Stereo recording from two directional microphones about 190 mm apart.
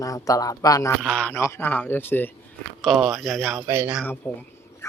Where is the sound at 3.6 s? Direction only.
10° right (ahead or behind).